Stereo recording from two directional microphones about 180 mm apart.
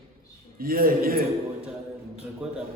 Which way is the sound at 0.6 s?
55° right (ahead or behind).